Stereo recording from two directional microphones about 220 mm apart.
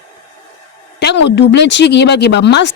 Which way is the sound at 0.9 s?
50° left (ahead or behind).